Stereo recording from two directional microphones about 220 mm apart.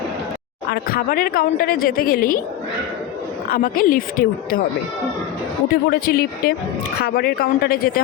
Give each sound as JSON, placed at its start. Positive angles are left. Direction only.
{"t": 0.7, "sound": "a woman's voice", "side_deg": 45}
{"t": 3.5, "sound": "speech", "side_deg": 40}
{"t": 5.9, "sound": "a woman's voice", "side_deg": 45}